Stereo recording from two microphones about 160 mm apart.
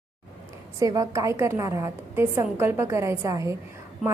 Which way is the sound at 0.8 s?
20° right (ahead or behind).